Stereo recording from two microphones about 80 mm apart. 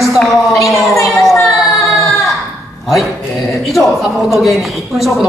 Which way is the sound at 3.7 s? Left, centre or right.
Centre.